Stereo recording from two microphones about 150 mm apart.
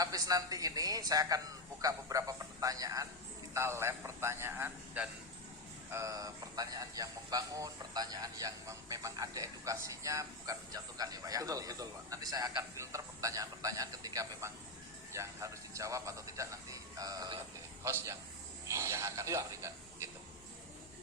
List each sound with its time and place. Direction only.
0.0 s a man's voice: 25° right (ahead or behind)